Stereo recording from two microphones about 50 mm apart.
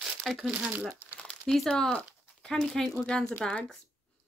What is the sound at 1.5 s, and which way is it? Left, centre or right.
Speech, centre.